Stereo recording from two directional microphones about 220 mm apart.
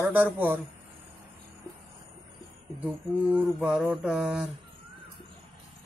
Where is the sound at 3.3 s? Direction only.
5° right (ahead or behind).